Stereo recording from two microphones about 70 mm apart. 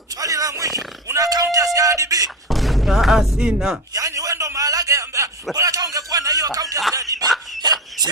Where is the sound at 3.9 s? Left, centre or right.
Right.